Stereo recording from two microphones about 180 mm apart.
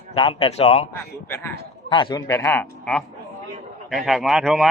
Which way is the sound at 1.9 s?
25° left (ahead or behind).